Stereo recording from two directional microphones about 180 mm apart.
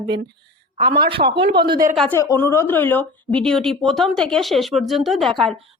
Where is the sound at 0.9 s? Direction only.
65° right (ahead or behind).